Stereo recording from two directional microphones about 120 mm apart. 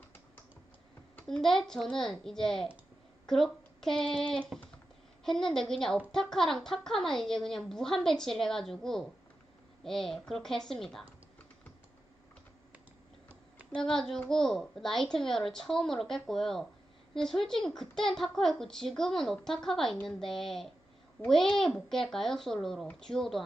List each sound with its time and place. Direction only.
1.1 s a woman's voice: 5° left (ahead or behind)
13.7 s a woman's voice: 10° left (ahead or behind)